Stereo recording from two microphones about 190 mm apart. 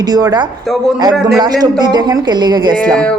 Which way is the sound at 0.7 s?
Centre (ahead or behind).